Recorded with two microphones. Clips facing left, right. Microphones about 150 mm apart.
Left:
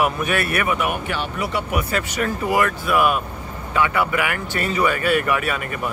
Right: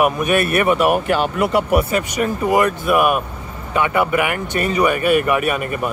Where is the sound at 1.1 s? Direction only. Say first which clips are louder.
Right 8 dB; 45° right (ahead or behind).